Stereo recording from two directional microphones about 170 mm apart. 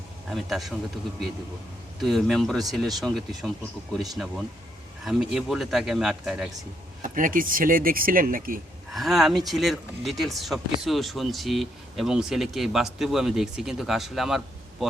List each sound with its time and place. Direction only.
0.3 s speech: centre (ahead or behind)
2.0 s speech: centre (ahead or behind)
7.0 s speech: 55° right (ahead or behind)
8.9 s speech: centre (ahead or behind)